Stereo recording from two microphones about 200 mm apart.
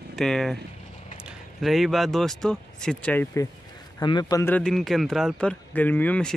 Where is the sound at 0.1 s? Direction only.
Centre (ahead or behind).